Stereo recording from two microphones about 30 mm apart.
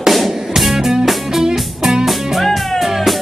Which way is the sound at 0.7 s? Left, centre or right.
Centre.